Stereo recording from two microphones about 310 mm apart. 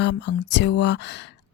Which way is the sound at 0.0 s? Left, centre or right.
Left.